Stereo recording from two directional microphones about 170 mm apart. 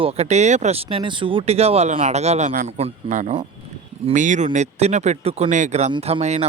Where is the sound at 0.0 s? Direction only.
35° right (ahead or behind).